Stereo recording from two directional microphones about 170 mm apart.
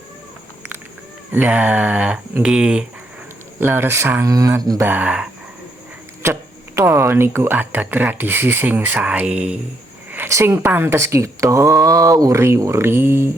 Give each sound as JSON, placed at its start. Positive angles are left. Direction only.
{"t": 1.3, "sound": "speech", "side_deg": -10}
{"t": 6.7, "sound": "speech", "side_deg": -15}